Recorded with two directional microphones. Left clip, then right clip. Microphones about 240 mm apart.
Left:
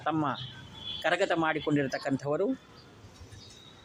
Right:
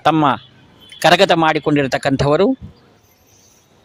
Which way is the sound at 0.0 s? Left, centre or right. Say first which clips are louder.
Right 16 dB; right.